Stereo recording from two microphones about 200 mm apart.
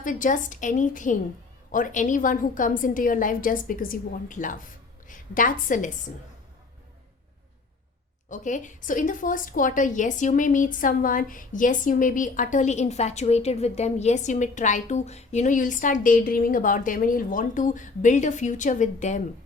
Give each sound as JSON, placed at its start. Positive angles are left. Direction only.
{"t": 0.0, "sound": "a woman's voice", "side_deg": 40}
{"t": 8.3, "sound": "a woman's voice", "side_deg": 40}